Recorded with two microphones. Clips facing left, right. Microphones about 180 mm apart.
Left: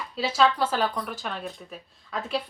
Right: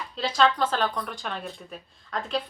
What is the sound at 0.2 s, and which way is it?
Speech, 5° left (ahead or behind).